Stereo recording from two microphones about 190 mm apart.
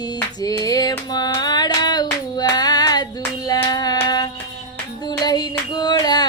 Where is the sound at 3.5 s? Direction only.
20° left (ahead or behind).